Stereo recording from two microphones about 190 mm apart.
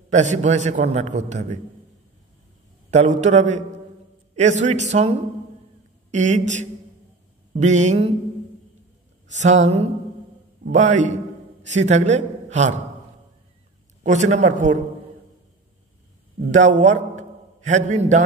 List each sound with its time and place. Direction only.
0.1 s a man's voice: 40° right (ahead or behind)
2.9 s a man's voice: 40° right (ahead or behind)
4.6 s a man's voice: 40° right (ahead or behind)
6.1 s a man's voice: 40° right (ahead or behind)
9.4 s a man's voice: 40° right (ahead or behind)
14.0 s a man's voice: 40° right (ahead or behind)
16.3 s a man's voice: 40° right (ahead or behind)